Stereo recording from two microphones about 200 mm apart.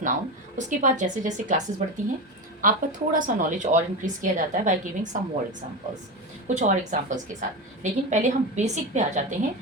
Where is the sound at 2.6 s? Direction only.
45° right (ahead or behind).